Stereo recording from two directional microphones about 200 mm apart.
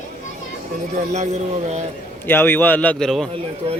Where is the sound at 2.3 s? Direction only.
10° left (ahead or behind).